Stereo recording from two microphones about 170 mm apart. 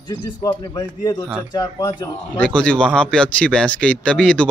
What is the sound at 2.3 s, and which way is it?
Speech, 5° left (ahead or behind).